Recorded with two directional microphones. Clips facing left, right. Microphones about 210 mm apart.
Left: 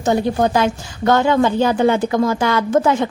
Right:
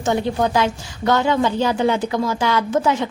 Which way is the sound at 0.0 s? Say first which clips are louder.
Left 3 dB; 40° left (ahead or behind).